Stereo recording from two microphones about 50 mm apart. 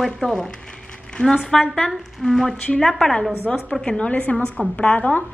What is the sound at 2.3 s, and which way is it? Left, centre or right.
A woman's voice, centre.